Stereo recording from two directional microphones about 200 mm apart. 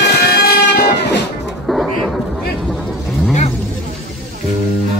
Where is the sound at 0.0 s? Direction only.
55° left (ahead or behind).